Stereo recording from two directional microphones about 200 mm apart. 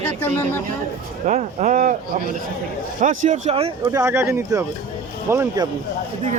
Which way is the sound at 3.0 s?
40° right (ahead or behind).